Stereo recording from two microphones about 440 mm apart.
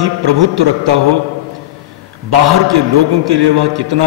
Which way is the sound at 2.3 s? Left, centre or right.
Right.